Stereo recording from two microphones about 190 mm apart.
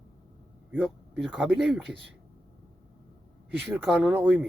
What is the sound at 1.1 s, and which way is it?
Speech, centre (ahead or behind).